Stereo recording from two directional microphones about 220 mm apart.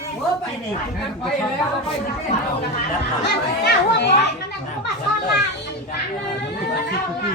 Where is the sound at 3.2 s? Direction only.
50° left (ahead or behind).